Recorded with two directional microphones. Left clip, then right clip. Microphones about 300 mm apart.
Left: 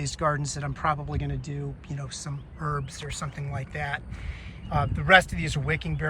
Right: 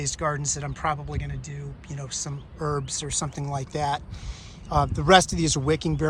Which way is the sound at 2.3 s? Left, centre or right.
Centre.